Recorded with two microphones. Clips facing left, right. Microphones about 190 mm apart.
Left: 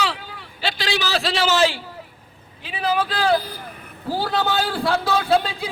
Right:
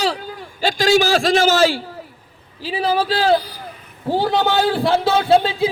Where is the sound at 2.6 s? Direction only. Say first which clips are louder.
Right 3 dB; 30° right (ahead or behind).